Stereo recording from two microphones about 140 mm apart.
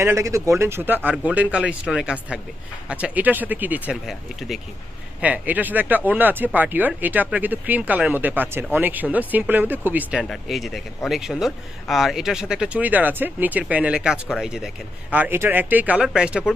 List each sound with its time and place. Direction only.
0.0 s speech: 20° right (ahead or behind); by 14.7 s centre (ahead or behind)
15.1 s speech: 15° right (ahead or behind)